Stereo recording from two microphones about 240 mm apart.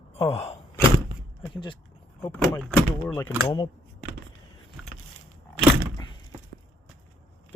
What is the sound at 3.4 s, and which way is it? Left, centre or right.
Speech, centre.